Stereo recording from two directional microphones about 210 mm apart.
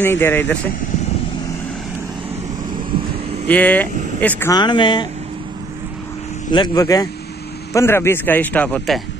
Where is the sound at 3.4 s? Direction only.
5° left (ahead or behind).